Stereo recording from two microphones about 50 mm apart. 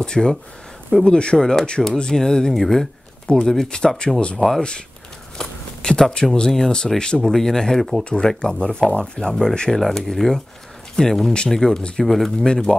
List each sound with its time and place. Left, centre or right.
0.0 s speech: centre
3.3 s speech: centre
4.4 s speech: centre
5.4 s a sound: centre
6.5 s speech: centre